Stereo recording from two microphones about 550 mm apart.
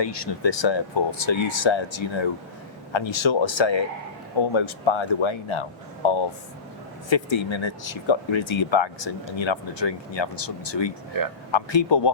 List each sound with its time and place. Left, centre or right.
0.0 s speech: left